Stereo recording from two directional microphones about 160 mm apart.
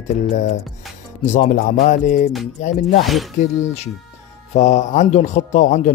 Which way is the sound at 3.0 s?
Centre (ahead or behind).